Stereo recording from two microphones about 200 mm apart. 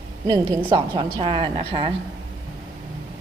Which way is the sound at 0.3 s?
15° right (ahead or behind).